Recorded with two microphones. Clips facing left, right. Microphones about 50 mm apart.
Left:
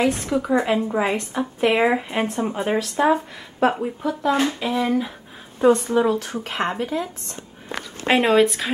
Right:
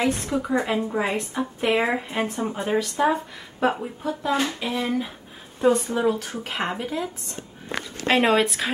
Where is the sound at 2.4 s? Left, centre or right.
Centre.